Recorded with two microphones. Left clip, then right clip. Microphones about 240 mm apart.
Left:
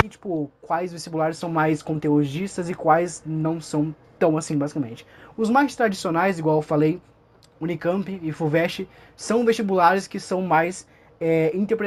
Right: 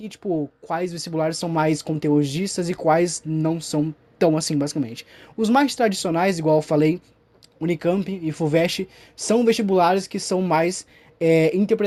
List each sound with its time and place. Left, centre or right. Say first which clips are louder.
0.1 s speech: right 3 dB; right
0.7 s speech: left 1 dB; right
5.4 s speech: right 1 dB; right
5.7 s speech: right 1 dB; right